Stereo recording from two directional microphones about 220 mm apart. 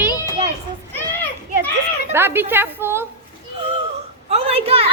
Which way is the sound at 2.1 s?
10° right (ahead or behind).